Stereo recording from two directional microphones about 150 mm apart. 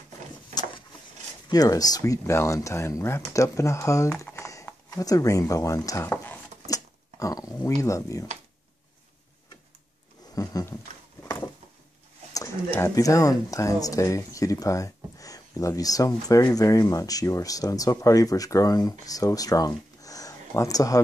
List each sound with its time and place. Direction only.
1.5 s speech: 25° left (ahead or behind)
6.7 s a sound: 25° left (ahead or behind)
7.8 s speech: 20° left (ahead or behind)
10.3 s speech: 25° left (ahead or behind)
11.2 s a sound: 25° left (ahead or behind)
12.4 s speech: 20° left (ahead or behind)